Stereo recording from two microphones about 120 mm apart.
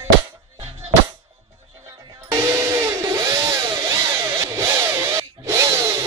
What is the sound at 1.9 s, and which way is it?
Music, 30° right (ahead or behind).